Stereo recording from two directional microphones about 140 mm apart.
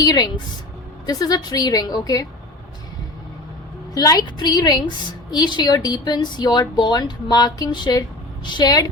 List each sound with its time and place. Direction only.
0.0 s a woman's voice: 30° left (ahead or behind)
3.9 s a woman's voice: 25° left (ahead or behind)